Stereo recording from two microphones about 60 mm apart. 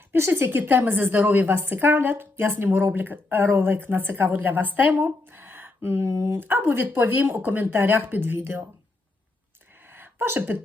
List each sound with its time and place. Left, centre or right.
0.1 s a woman's voice: right
9.9 s sneeze: right